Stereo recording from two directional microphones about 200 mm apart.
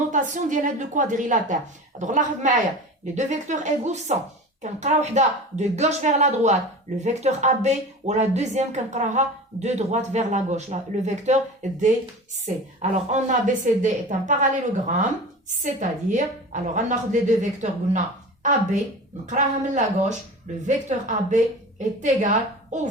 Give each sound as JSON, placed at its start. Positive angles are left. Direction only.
{"t": 0.1, "sound": "speech", "side_deg": -40}
{"t": 12.8, "sound": "speech", "side_deg": -35}
{"t": 19.2, "sound": "speech", "side_deg": -35}